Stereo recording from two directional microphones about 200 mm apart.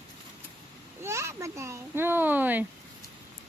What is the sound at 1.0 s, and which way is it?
Speech, 15° right (ahead or behind).